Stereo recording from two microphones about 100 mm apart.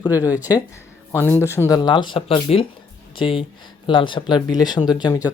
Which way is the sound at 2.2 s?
75° left (ahead or behind).